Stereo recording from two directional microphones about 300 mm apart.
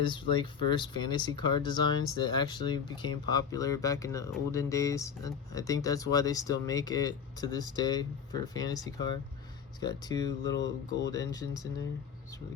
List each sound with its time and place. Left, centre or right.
0.0 s speech: centre
10.6 s speech: left
11.1 s speech: centre